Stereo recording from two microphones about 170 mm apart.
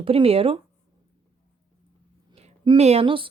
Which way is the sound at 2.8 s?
40° right (ahead or behind).